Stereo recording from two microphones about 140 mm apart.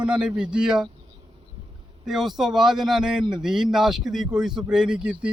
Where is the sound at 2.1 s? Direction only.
Centre (ahead or behind).